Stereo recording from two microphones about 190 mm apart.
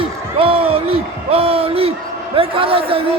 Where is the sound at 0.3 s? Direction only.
30° right (ahead or behind).